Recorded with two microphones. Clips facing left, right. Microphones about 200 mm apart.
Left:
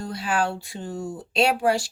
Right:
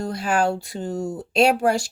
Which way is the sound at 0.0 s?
45° right (ahead or behind).